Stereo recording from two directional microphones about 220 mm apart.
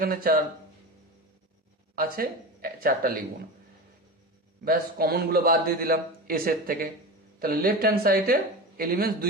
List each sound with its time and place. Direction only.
0.0 s speech: 40° right (ahead or behind)
2.0 s speech: 40° right (ahead or behind)
4.6 s a man's voice: 40° right (ahead or behind)